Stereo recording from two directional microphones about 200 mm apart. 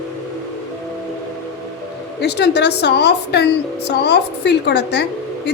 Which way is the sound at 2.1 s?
55° left (ahead or behind).